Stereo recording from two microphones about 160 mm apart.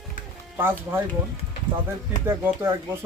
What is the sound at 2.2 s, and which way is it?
Speech, 15° right (ahead or behind).